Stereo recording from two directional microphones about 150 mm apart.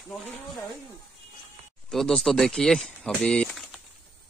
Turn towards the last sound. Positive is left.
turn(degrees=5)  # may be behind; listen again after turning